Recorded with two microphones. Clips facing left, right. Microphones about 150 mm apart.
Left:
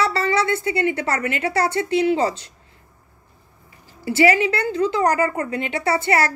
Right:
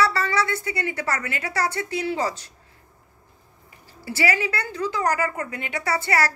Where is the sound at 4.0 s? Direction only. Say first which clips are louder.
Left 7 dB; 25° left (ahead or behind).